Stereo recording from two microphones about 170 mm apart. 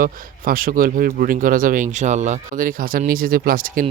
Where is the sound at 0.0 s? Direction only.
55° right (ahead or behind).